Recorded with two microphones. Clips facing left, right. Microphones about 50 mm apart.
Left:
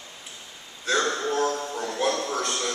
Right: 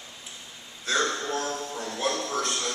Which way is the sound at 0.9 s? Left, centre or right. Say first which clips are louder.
Left 3 dB; centre.